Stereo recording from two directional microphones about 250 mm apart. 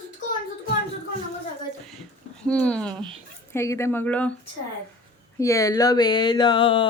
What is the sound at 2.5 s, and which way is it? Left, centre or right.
Speech, centre.